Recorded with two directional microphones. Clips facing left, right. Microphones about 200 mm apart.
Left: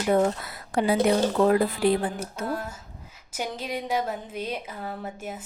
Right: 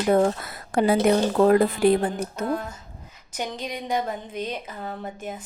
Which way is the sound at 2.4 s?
5° left (ahead or behind).